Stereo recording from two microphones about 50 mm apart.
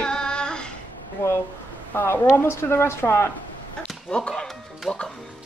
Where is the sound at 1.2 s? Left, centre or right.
Left.